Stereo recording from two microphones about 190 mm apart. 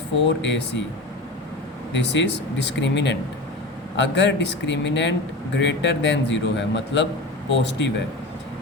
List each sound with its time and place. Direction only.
0.3 s a man's voice: 70° left (ahead or behind)
1.9 s a man's voice: 70° left (ahead or behind)